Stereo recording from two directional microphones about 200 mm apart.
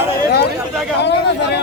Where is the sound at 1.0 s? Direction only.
60° left (ahead or behind).